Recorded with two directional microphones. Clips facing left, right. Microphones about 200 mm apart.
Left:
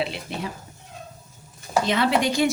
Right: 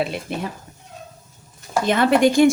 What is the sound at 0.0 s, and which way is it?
Speech, 50° right (ahead or behind).